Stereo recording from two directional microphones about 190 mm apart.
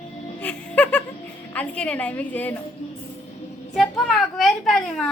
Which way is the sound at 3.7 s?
Centre (ahead or behind).